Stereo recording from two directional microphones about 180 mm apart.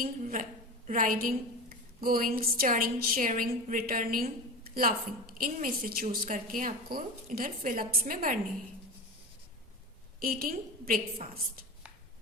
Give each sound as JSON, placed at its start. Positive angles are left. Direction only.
{"t": 0.0, "sound": "a woman's voice", "side_deg": -45}
{"t": 10.2, "sound": "a woman's voice", "side_deg": -50}